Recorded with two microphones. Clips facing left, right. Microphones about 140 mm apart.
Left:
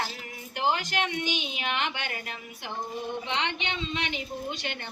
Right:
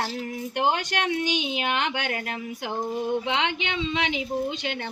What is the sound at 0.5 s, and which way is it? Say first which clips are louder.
A woman's voice: right 2 dB; 60° right (ahead or behind).